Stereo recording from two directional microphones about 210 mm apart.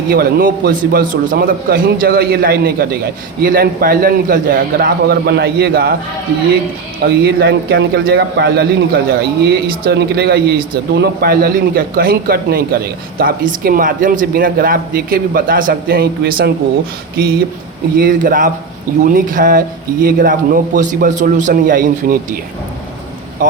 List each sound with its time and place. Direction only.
0.1 s speech: 45° right (ahead or behind)
7.0 s speech: 50° right (ahead or behind)
17.9 s speech: 40° right (ahead or behind)
23.4 s speech: 40° right (ahead or behind)